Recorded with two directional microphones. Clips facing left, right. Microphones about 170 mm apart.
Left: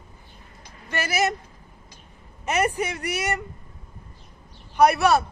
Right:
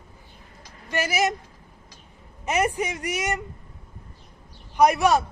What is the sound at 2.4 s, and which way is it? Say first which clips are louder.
Speech: even; 15° right (ahead or behind).